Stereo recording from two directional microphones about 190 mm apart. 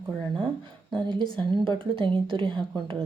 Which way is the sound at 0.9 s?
25° right (ahead or behind).